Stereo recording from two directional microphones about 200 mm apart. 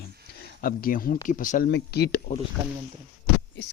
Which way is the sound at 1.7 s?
55° left (ahead or behind).